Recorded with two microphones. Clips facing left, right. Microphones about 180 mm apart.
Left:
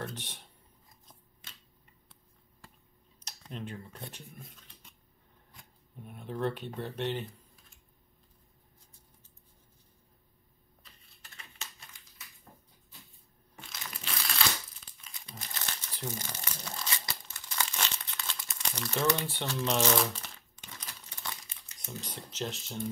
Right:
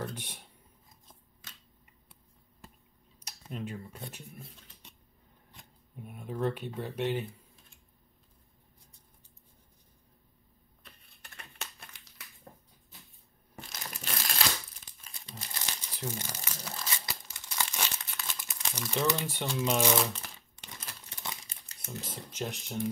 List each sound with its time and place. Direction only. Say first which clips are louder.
0.0 s speech: right 1 dB; 10° right (ahead or behind)
3.3 s speech: right 2 dB; 5° right (ahead or behind)
5.9 s speech: right 1 dB; 5° right (ahead or behind)
10.8 s typing: right 3 dB; 60° right (ahead or behind)
13.6 s crushing: right 2 dB; 40° right (ahead or behind)
15.4 s crumpling: even; 10° right (ahead or behind)
21.1 s crumpling: right 1 dB; 20° right (ahead or behind)
21.8 s speech: right 1 dB; centre (ahead or behind)